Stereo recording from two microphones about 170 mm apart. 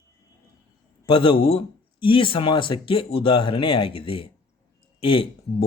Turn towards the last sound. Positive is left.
turn(degrees=30)  # may be behind; listen again after turning